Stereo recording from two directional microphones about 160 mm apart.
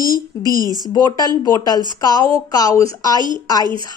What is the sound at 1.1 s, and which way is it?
Speech, 25° left (ahead or behind).